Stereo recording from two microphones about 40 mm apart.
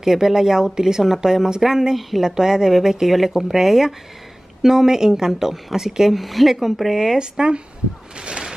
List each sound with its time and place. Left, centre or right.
0.0 s a woman's voice: centre
2.0 s speech: centre
2.2 s a woman's voice: centre
7.2 s speech: right
8.2 s a sound: right